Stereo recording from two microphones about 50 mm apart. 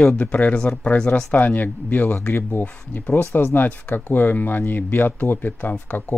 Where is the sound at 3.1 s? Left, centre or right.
Left.